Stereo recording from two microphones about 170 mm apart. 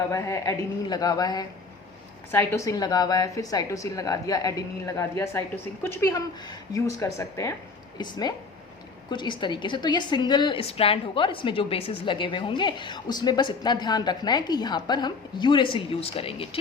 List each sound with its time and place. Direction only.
0.1 s a woman's voice: 15° left (ahead or behind)
9.0 s a woman's voice: 25° left (ahead or behind)